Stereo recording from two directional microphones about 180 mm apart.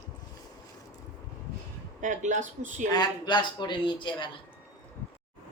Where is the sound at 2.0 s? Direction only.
45° right (ahead or behind).